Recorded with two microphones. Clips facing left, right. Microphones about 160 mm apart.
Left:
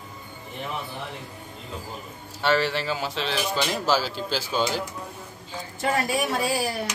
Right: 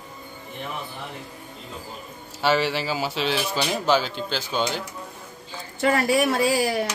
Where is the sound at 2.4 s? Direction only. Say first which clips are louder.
Right 1 dB; 5° right (ahead or behind).